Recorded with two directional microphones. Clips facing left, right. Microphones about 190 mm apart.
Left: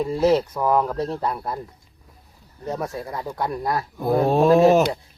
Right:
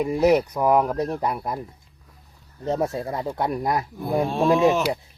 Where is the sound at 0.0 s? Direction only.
15° right (ahead or behind).